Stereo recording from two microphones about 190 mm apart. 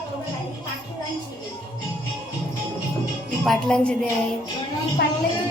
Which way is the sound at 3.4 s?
Centre (ahead or behind).